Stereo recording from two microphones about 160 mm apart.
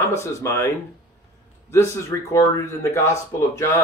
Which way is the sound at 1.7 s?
15° left (ahead or behind).